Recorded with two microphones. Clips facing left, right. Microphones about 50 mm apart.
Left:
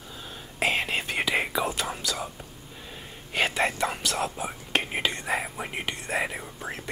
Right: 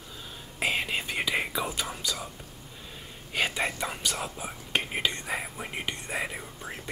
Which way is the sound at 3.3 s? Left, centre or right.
Centre.